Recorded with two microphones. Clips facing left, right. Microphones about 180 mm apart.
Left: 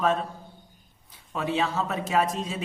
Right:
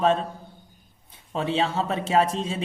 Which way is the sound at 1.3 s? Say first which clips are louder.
Right 2 dB; 25° right (ahead or behind).